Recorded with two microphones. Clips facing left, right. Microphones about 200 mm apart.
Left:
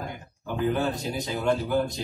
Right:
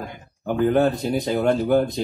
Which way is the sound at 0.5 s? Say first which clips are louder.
Right 7 dB; 55° right (ahead or behind).